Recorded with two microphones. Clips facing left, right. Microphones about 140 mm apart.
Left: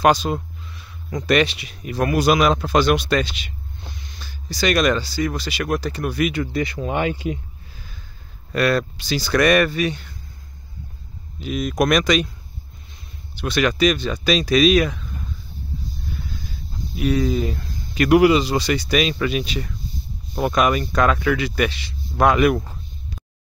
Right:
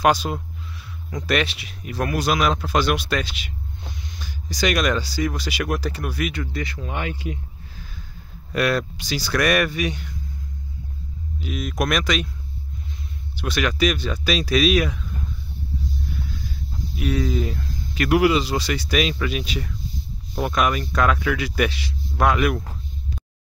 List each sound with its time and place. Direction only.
0.0 s speech: 5° right (ahead or behind)
6.4 s speech: 15° left (ahead or behind)
8.5 s speech: 10° right (ahead or behind)
11.4 s speech: 5° right (ahead or behind)
13.4 s speech: 5° right (ahead or behind)
16.9 s speech: centre (ahead or behind)